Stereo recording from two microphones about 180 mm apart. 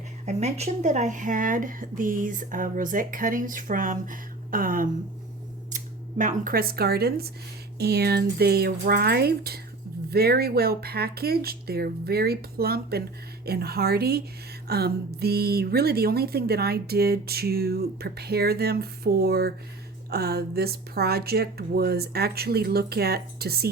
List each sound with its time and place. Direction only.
0.3 s speech: 40° right (ahead or behind); by 23.6 s 60° right (ahead or behind)